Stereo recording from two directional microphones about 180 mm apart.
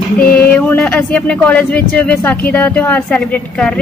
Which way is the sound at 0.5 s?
5° left (ahead or behind).